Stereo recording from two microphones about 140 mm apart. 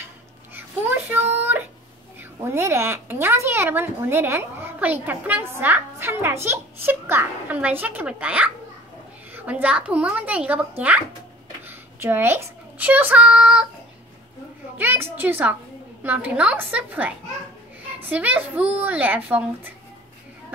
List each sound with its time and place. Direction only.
0.6 s a child's voice: 15° right (ahead or behind)
11.6 s a child's voice: 15° right (ahead or behind)
14.8 s a woman's voice: 15° right (ahead or behind)
18.1 s a woman's voice: 10° right (ahead or behind)